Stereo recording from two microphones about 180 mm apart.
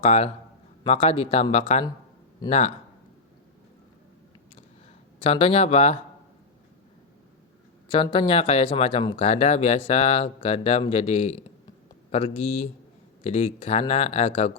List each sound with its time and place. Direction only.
0.0 s speech: 35° left (ahead or behind)
5.2 s speech: 35° left (ahead or behind)
7.9 s speech: 25° left (ahead or behind)